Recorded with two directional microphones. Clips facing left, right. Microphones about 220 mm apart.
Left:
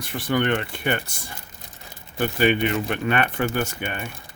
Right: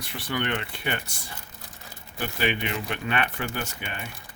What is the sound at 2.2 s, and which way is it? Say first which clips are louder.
Speech: left 8 dB; 50° left (ahead or behind).